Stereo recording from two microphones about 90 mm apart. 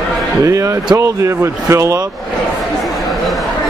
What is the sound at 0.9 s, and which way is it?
Speech, 30° right (ahead or behind).